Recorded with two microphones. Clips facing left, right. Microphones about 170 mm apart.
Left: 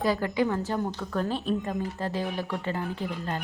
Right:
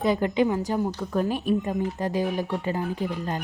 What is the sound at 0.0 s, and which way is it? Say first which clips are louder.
Speech: right 3 dB; 20° right (ahead or behind).